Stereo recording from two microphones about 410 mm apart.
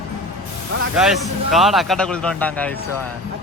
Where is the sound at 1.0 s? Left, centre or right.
Centre.